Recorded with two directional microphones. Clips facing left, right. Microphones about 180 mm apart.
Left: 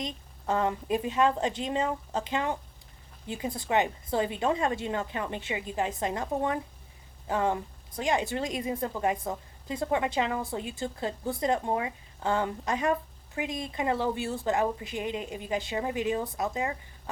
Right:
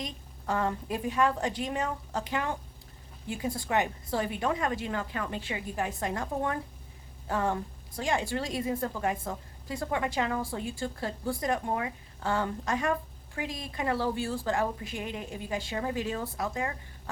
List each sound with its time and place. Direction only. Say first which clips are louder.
0.0 s a woman's voice: left 2 dB; 20° left (ahead or behind)